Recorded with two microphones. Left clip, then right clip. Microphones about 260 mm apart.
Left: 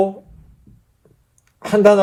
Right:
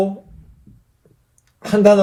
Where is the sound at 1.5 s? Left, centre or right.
Left.